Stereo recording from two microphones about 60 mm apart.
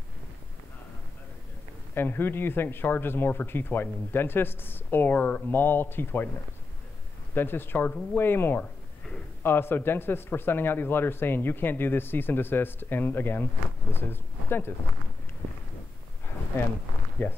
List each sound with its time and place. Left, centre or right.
2.0 s speech: left
7.3 s speech: left
16.5 s speech: left
17.2 s speech: left